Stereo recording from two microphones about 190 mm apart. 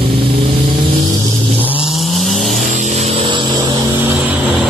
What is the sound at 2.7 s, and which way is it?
Vehicle, 40° right (ahead or behind).